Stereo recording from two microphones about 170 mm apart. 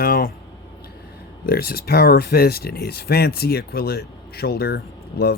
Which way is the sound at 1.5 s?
65° left (ahead or behind).